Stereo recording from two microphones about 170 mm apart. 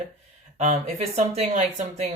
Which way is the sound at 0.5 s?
40° right (ahead or behind).